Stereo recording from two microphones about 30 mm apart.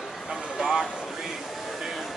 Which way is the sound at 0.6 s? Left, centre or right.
Centre.